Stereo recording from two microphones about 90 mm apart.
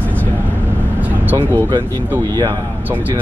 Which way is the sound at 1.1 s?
20° right (ahead or behind).